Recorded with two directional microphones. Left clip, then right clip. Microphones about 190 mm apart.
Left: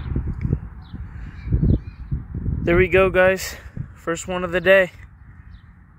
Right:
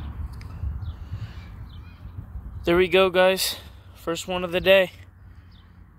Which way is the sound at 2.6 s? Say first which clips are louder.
Left 2 dB; 15° right (ahead or behind).